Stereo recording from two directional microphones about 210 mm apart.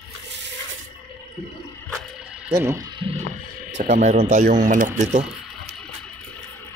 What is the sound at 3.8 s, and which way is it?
Speech, 35° right (ahead or behind).